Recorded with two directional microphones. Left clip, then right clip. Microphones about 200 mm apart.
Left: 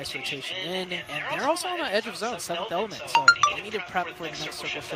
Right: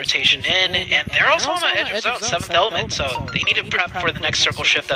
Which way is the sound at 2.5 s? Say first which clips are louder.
Right 11 dB; 50° right (ahead or behind).